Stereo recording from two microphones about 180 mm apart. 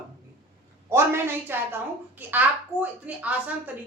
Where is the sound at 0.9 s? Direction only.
15° right (ahead or behind).